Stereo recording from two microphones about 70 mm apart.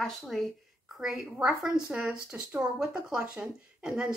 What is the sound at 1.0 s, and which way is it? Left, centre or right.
Speech, centre.